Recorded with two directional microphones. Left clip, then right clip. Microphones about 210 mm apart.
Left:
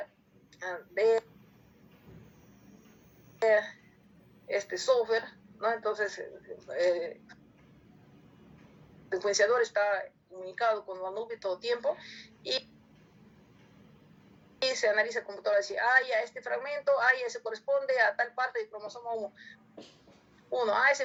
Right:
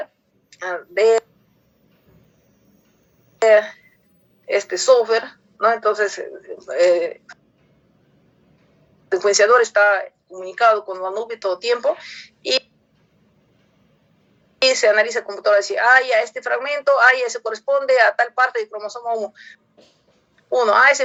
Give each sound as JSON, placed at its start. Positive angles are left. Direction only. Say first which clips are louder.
{"t": 0.5, "sound": "a woman's voice", "louder": "right 12 dB", "side_deg": -45}
{"t": 3.3, "sound": "a woman's voice", "louder": "right 13 dB", "side_deg": -45}
{"t": 9.0, "sound": "a woman's voice", "louder": "right 12 dB", "side_deg": -45}
{"t": 14.6, "sound": "a woman's voice", "louder": "right 13 dB", "side_deg": -45}